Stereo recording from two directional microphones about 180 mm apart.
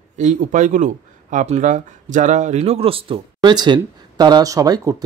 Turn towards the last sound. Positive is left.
turn(degrees=-20)  # may be behind; listen again after turning